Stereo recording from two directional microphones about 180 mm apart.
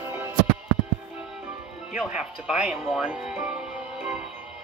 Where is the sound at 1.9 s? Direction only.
5° right (ahead or behind).